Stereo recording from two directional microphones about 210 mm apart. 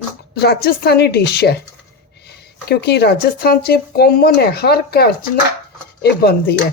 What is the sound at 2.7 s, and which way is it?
Speech, 50° left (ahead or behind).